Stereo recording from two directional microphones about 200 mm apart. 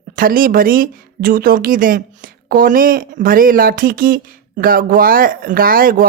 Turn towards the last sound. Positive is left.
turn(degrees=-45)  # may be behind; listen again after turning